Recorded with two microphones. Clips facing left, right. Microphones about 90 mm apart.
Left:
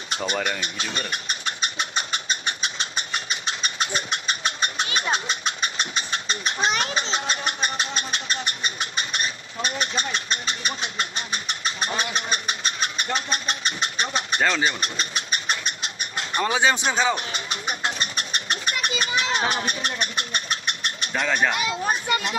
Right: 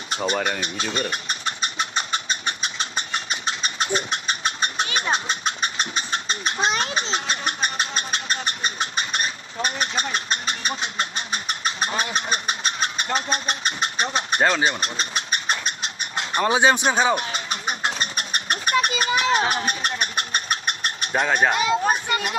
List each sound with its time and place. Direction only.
0.3 s engine: 30° right (ahead or behind)
4.9 s vehicle: 35° right (ahead or behind)
7.4 s engine: 30° right (ahead or behind)
16.2 s speech: 25° right (ahead or behind)
17.1 s a sound: 35° right (ahead or behind)
21.1 s speech: 25° right (ahead or behind)